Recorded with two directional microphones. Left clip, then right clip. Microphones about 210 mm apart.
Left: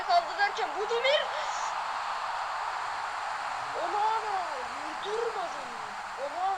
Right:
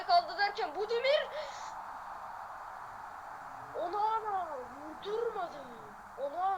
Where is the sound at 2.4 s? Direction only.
45° left (ahead or behind).